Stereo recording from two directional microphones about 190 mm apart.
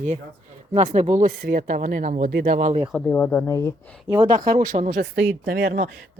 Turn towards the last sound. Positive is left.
turn(degrees=-45)  # may be behind; listen again after turning